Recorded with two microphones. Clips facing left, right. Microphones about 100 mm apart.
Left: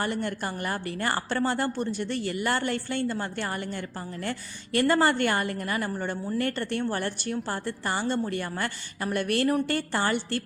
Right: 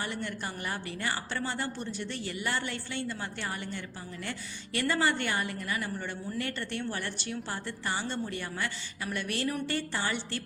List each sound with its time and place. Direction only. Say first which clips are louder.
0.0 s a woman's voice: left 6 dB; 50° left (ahead or behind)